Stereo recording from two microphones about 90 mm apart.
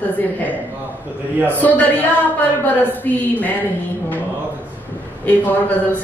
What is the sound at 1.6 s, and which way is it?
A woman's voice, 20° left (ahead or behind).